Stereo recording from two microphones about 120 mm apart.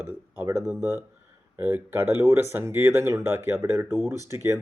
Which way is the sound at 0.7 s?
20° right (ahead or behind).